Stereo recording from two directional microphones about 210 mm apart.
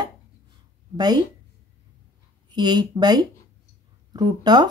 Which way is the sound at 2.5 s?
20° right (ahead or behind).